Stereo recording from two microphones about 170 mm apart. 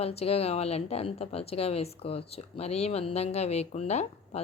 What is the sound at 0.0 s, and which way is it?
A woman's voice, 35° left (ahead or behind).